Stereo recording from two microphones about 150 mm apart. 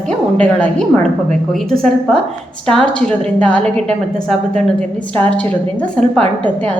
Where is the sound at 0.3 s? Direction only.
10° left (ahead or behind).